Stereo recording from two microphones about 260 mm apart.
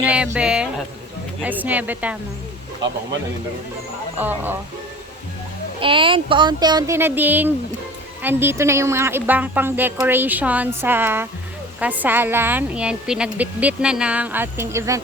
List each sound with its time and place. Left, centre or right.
0.0 s a woman's voice: centre
4.2 s a woman's voice: centre
5.8 s a woman's voice: centre